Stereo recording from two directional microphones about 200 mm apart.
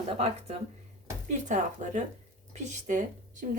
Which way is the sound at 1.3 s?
40° right (ahead or behind).